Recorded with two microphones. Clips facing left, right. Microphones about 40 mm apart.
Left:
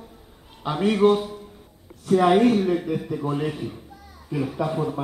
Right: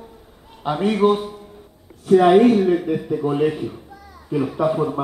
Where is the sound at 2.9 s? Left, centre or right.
Right.